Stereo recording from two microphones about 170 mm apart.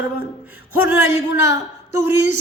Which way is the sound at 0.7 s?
10° right (ahead or behind).